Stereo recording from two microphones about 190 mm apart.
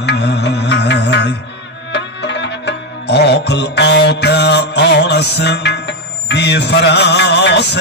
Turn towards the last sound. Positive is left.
turn(degrees=65)  # may be behind; listen again after turning